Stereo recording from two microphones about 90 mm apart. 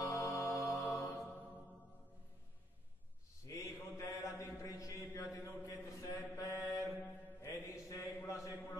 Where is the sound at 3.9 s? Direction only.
35° left (ahead or behind).